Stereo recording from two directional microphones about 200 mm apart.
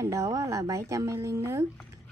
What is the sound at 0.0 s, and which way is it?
Speech, 15° right (ahead or behind).